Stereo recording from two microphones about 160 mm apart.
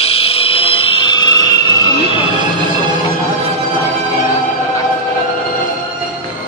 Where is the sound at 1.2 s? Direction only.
25° left (ahead or behind).